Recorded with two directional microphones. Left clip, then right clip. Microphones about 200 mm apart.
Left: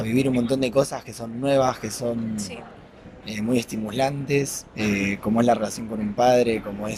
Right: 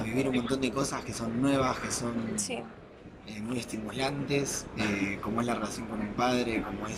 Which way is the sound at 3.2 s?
55° left (ahead or behind).